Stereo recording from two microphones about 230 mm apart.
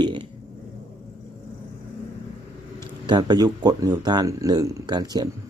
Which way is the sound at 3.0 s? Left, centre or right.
Centre.